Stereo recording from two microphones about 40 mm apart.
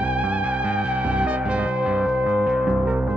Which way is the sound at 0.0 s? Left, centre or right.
Right.